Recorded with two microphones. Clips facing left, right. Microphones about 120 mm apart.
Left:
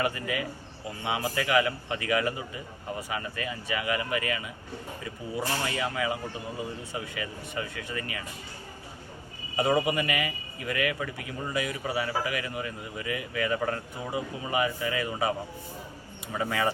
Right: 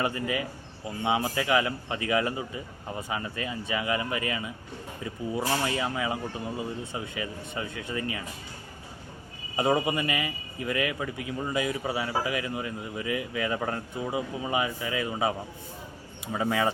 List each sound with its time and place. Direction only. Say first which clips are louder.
0.0 s a man's voice: right 1 dB; 25° right (ahead or behind)
5.6 s a man's voice: right 1 dB; 25° right (ahead or behind)
9.6 s a man's voice: even; 20° right (ahead or behind)
16.3 s a man's voice: right 2 dB; 20° right (ahead or behind)